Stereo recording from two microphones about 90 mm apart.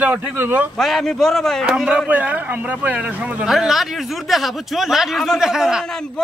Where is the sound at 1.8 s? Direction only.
15° right (ahead or behind).